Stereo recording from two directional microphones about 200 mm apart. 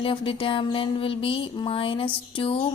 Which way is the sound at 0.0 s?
25° left (ahead or behind).